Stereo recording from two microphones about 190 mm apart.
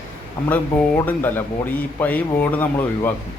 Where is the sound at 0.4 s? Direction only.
10° left (ahead or behind).